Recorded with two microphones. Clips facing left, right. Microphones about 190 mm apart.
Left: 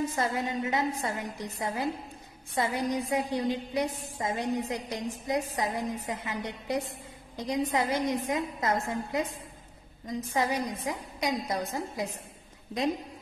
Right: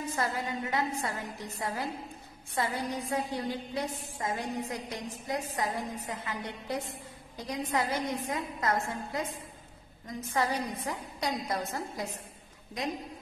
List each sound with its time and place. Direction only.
0.1 s a woman's voice: 20° left (ahead or behind)